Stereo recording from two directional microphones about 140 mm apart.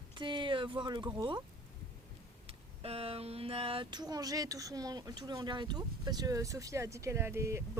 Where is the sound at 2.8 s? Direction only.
45° right (ahead or behind).